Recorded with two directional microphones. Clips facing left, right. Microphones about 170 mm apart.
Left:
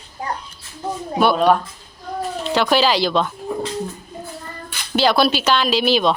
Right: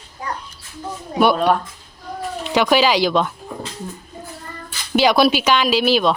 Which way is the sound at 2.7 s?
10° right (ahead or behind).